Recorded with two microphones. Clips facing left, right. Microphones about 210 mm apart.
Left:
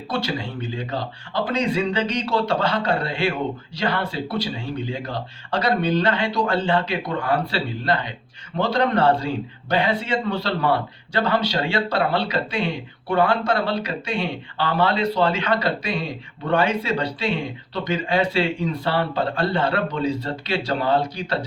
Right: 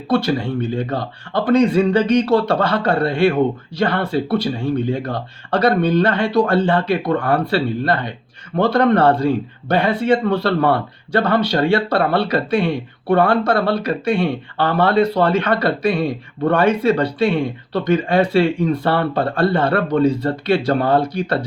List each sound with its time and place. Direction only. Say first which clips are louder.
0.1 s a man's voice: right 9 dB; 55° right (ahead or behind)